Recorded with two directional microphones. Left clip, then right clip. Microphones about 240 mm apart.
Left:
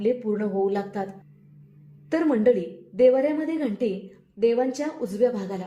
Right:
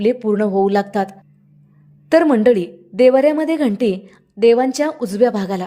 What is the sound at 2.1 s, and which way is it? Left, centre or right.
A woman's voice, right.